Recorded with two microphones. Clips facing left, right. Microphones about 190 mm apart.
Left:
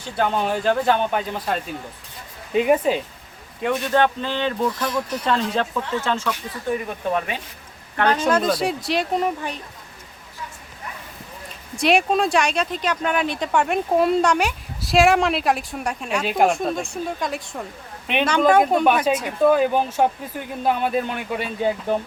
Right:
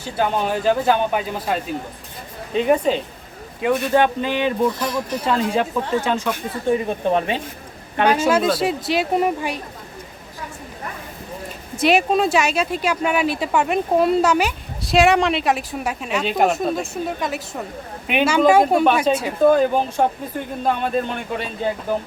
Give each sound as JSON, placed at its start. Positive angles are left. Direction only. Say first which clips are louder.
{"t": 0.0, "sound": "speech", "louder": "right 1 dB", "side_deg": -5}
{"t": 2.5, "sound": "speech", "louder": "even", "side_deg": 10}
{"t": 3.6, "sound": "speech", "louder": "right 2 dB", "side_deg": -5}
{"t": 6.7, "sound": "speech", "louder": "right 5 dB", "side_deg": -25}
{"t": 7.9, "sound": "speech", "louder": "right 2 dB", "side_deg": -10}
{"t": 11.8, "sound": "speech", "louder": "right 2 dB", "side_deg": 0}
{"t": 19.1, "sound": "speech", "louder": "right 2 dB", "side_deg": 5}